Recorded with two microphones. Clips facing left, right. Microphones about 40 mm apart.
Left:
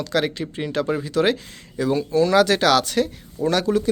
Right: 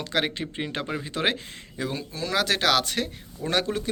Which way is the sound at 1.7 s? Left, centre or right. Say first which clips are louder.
Left 12 dB; centre.